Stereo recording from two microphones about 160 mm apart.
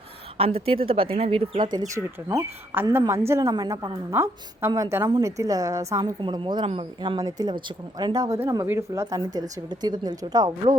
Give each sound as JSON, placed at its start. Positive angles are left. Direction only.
{"t": 0.3, "sound": "speech", "side_deg": -35}
{"t": 2.3, "sound": "speech", "side_deg": -15}
{"t": 6.1, "sound": "speech", "side_deg": -30}